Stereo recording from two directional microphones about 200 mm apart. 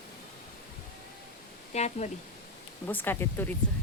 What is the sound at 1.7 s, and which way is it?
Speech, 35° left (ahead or behind).